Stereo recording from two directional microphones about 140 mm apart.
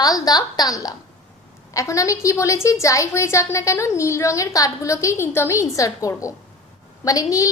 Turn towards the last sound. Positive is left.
turn(degrees=25)  # may be behind; listen again after turning